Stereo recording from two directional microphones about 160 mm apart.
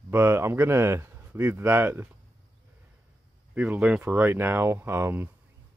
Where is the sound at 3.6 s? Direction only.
10° right (ahead or behind).